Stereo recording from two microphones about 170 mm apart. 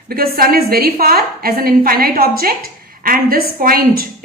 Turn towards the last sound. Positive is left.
turn(degrees=-60)  # may be behind; listen again after turning